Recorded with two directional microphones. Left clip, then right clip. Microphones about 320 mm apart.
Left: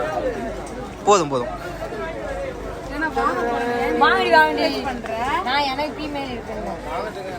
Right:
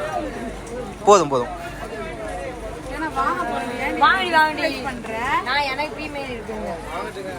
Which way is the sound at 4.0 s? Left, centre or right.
Left.